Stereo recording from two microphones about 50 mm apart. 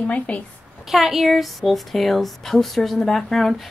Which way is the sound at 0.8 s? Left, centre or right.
Centre.